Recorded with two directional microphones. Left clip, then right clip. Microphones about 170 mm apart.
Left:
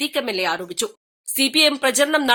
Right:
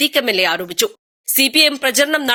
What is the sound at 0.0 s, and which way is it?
Speech, 10° right (ahead or behind).